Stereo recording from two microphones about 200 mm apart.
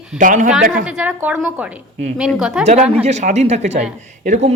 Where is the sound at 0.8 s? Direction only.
5° right (ahead or behind).